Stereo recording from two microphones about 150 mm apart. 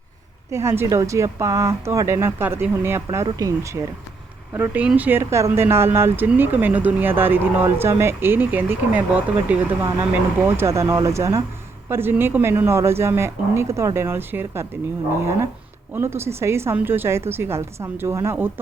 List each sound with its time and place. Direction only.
0.5 s speech: 15° right (ahead or behind)